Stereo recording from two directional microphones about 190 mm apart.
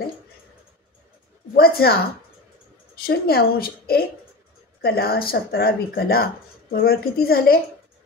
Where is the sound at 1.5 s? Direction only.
55° left (ahead or behind).